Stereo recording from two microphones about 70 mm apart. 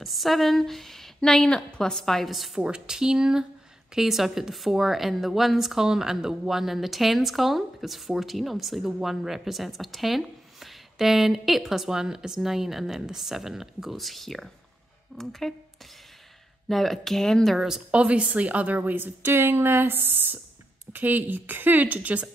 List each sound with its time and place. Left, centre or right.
0.0 s speech: centre
2.6 s speech: centre
17.6 s speech: centre
17.9 s a woman's voice: centre